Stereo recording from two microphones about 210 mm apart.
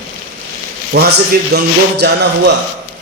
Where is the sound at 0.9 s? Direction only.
50° right (ahead or behind).